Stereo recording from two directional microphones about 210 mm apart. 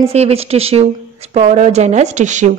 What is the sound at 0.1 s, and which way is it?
Speech, 30° right (ahead or behind).